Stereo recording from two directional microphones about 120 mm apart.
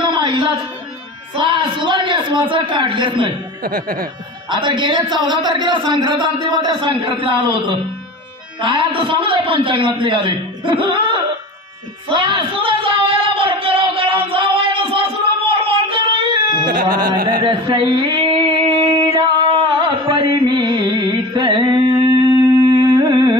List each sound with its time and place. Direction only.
0.0 s a sound: 40° right (ahead or behind)
1.3 s a man's voice: 45° right (ahead or behind)
4.5 s a man's voice: 40° right (ahead or behind)
12.1 s a sound: 40° right (ahead or behind)
19.5 s carnatic music: 40° right (ahead or behind)
20.3 s music: 40° right (ahead or behind)
22.6 s humming: 30° right (ahead or behind)